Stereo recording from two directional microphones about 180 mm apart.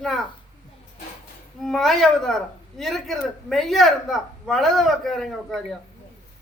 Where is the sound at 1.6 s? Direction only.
Centre (ahead or behind).